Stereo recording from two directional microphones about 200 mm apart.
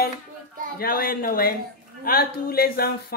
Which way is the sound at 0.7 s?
45° left (ahead or behind).